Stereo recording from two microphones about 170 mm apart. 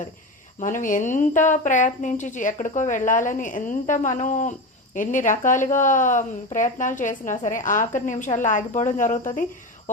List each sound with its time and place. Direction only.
0.6 s a woman's voice: 50° left (ahead or behind)